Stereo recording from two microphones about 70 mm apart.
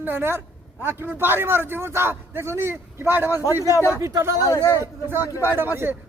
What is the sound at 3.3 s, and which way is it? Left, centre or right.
Speech, left.